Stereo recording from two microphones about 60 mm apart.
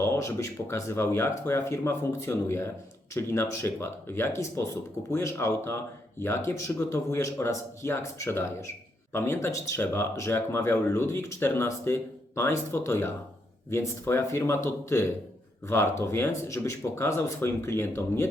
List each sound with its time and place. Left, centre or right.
0.0 s speech: left